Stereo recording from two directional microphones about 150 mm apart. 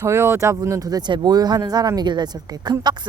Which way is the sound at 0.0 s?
15° right (ahead or behind).